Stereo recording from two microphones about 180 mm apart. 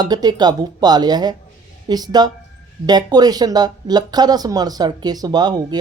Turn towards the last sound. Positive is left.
turn(degrees=-25)  # may be behind; listen again after turning